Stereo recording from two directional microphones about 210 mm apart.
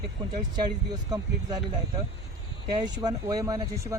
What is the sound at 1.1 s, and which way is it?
Speech, 20° right (ahead or behind).